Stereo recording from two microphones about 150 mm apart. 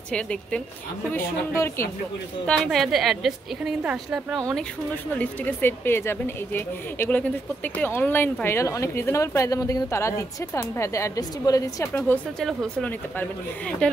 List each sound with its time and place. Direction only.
0.1 s a woman's voice: 5° left (ahead or behind)
1.1 s a woman's voice: 20° left (ahead or behind)
2.4 s a woman's voice: 5° left (ahead or behind)
5.2 s a woman's voice: 10° left (ahead or behind)
12.1 s a woman's voice: 5° left (ahead or behind)